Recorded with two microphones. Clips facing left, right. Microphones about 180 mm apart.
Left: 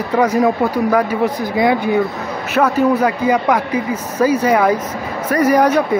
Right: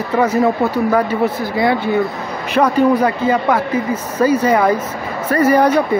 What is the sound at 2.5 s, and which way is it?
Speech, 5° left (ahead or behind).